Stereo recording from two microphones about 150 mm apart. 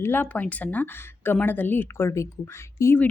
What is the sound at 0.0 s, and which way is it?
Speech, 15° left (ahead or behind).